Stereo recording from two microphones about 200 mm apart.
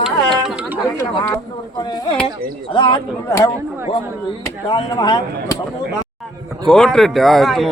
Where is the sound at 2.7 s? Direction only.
25° left (ahead or behind).